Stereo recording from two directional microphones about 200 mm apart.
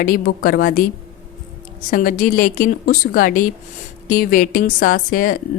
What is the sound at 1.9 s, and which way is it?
Speech, 45° left (ahead or behind).